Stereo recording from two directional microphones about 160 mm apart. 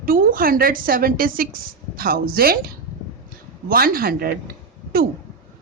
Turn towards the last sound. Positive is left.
turn(degrees=-65)  # may be behind; listen again after turning